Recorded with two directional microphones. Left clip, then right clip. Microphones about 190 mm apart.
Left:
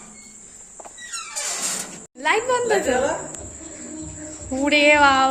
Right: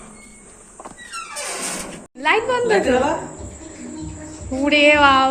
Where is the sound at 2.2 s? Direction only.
10° left (ahead or behind).